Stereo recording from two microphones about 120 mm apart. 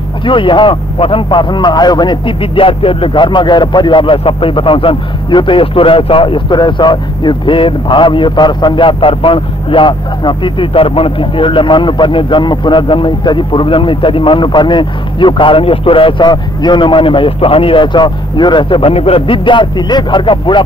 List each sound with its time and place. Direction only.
0.2 s a man's voice: 45° left (ahead or behind)